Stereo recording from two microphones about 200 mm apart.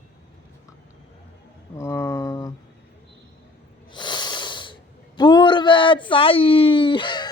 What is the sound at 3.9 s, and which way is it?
Snort, 20° left (ahead or behind).